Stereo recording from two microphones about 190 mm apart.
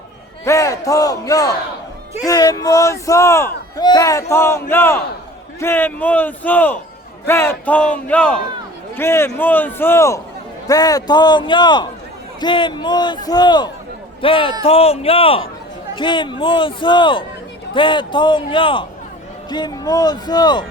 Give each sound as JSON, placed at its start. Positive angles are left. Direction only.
{"t": 0.4, "sound": "a man's voice", "side_deg": 15}